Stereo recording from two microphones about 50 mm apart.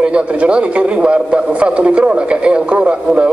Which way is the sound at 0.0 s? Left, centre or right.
Right.